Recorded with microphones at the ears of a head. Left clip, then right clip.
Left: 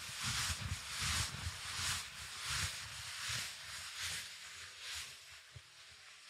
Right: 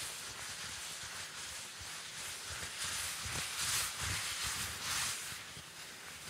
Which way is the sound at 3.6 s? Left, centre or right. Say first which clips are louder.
Right 8 dB; right.